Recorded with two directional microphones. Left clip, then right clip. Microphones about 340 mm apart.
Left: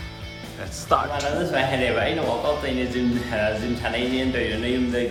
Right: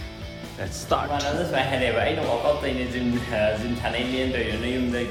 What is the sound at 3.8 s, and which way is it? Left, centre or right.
Speech, centre.